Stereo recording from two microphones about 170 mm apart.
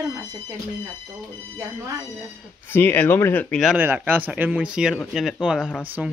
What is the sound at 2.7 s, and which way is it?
Speech, 10° left (ahead or behind).